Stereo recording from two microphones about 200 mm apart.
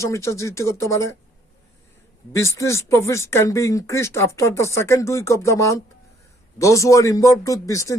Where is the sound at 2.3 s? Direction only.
15° left (ahead or behind).